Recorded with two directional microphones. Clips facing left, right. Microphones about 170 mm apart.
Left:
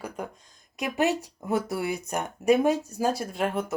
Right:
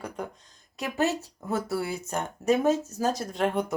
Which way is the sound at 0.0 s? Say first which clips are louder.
Even; 10° left (ahead or behind).